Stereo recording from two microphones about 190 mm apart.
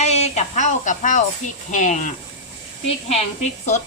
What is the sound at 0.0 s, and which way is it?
A woman's voice, 35° left (ahead or behind).